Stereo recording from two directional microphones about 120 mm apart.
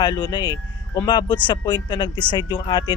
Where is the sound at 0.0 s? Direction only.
35° left (ahead or behind).